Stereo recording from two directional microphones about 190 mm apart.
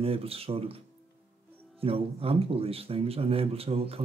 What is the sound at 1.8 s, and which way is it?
Speech, 30° right (ahead or behind).